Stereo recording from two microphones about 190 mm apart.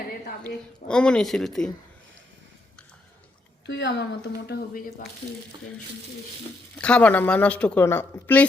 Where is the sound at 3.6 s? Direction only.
65° left (ahead or behind).